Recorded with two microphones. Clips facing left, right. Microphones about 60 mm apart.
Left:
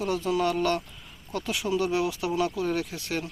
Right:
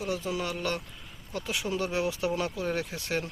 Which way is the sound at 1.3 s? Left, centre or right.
Right.